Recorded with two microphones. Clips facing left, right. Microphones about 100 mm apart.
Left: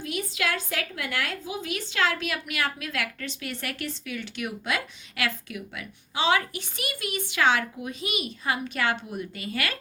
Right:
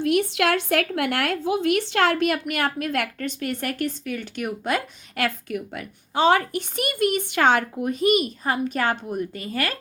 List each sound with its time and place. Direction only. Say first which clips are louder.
0.0 s a woman's voice: right 9 dB; 65° right (ahead or behind); by 9.7 s 40° right (ahead or behind)